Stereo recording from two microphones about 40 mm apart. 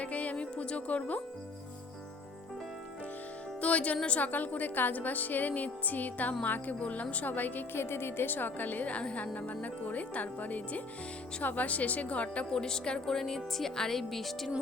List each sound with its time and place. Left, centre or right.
0.0 s music: left
3.6 s a woman's voice: left
6.7 s speech: left
7.7 s a woman's voice: left
8.9 s speech: left
12.5 s speech: centre
13.1 s speech: centre